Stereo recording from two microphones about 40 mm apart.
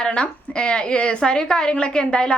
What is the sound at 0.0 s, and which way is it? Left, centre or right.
A woman's voice, left.